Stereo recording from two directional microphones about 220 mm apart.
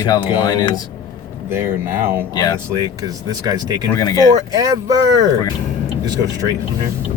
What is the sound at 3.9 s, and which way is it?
Speech, 15° left (ahead or behind).